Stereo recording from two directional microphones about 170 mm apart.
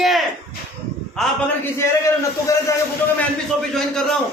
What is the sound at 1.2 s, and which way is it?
A man's voice, 10° left (ahead or behind).